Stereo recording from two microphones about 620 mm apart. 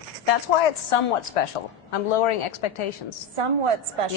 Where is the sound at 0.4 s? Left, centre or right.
Left.